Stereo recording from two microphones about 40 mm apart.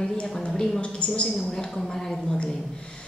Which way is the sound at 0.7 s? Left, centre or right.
Left.